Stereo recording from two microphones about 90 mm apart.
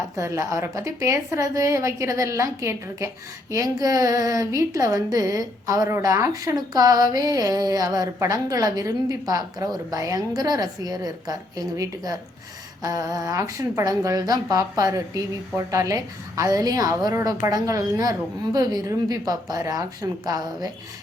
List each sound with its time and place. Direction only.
0.2 s a woman's voice: 35° right (ahead or behind)
12.8 s a woman's voice: 40° right (ahead or behind)